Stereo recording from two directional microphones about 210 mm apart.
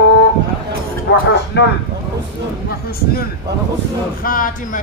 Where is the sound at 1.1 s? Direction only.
55° left (ahead or behind).